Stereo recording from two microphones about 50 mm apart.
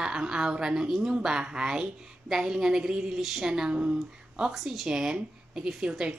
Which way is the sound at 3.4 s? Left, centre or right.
Centre.